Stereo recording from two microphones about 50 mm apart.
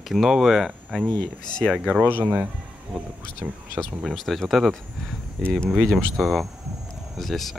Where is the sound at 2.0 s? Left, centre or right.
Right.